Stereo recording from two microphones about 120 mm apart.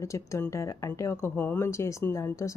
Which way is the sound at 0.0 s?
25° left (ahead or behind).